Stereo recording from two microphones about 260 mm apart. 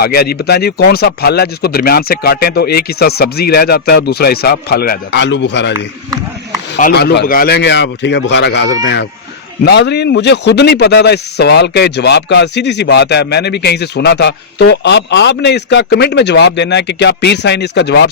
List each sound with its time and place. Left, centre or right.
0.0 s a man's voice: left
5.7 s speech: centre
6.7 s a man's voice: left